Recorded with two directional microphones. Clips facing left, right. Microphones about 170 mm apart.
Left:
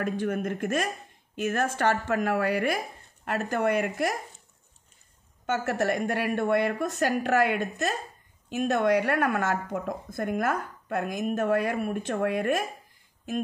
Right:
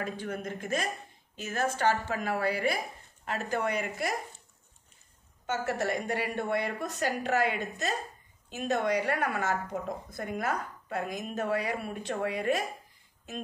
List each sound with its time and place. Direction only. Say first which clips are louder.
0.0 s a woman's voice: left 7 dB; 55° left (ahead or behind)
5.5 s a woman's voice: left 4 dB; 55° left (ahead or behind)